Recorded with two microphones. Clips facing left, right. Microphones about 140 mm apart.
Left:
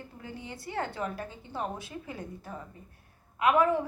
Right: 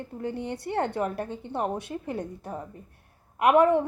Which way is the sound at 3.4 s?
60° right (ahead or behind).